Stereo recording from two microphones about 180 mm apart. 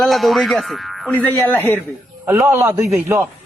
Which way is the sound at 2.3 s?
15° right (ahead or behind).